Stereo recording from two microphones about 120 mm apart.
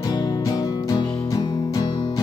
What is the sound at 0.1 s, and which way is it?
Music, 35° left (ahead or behind).